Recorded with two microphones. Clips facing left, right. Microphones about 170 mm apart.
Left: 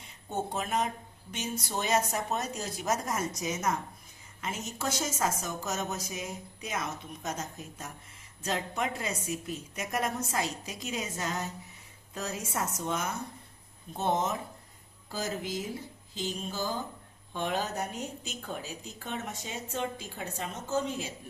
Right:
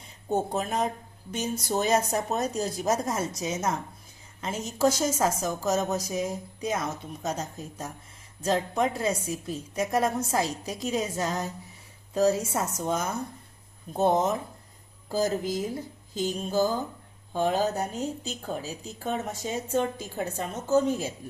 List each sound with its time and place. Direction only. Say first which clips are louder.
0.3 s a woman's voice: right 5 dB; 40° right (ahead or behind)
16.1 s music: right 9 dB; 45° right (ahead or behind)
17.3 s a woman's voice: right 7 dB; 35° right (ahead or behind)